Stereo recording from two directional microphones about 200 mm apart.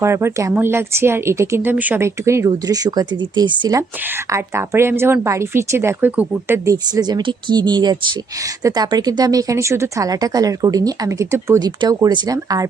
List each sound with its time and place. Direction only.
0.0 s speech: 15° right (ahead or behind)